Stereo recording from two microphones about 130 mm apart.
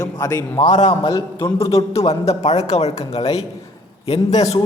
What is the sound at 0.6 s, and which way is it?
Speech, 60° left (ahead or behind).